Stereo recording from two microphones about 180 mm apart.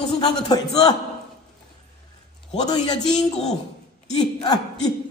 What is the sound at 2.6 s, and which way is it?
Speech, 25° left (ahead or behind).